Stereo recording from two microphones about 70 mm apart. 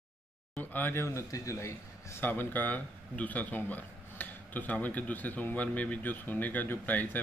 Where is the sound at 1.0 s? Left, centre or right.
Left.